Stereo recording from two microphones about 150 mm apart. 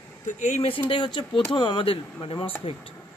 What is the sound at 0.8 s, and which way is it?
A man's voice, 35° left (ahead or behind).